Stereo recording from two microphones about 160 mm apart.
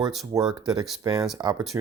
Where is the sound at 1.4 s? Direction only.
20° right (ahead or behind).